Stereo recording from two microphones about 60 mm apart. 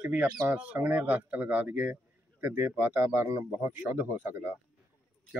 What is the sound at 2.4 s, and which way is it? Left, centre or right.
A man's voice, right.